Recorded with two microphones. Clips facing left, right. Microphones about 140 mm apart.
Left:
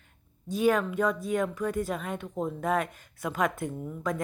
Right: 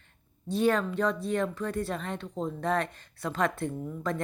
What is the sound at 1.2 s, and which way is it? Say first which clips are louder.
Speech: left 1 dB; 10° left (ahead or behind).